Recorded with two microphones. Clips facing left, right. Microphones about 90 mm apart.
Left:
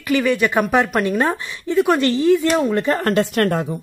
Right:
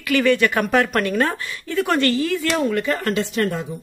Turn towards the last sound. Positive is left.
turn(degrees=60)  # may be behind; listen again after turning